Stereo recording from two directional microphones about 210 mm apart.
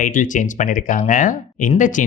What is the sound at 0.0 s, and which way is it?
Speech, 40° left (ahead or behind).